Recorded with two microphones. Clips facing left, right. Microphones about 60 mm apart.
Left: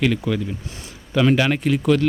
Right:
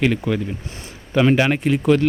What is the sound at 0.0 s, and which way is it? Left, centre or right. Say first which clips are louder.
Speech: right 1 dB; right.